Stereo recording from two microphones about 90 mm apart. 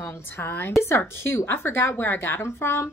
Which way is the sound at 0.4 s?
20° left (ahead or behind).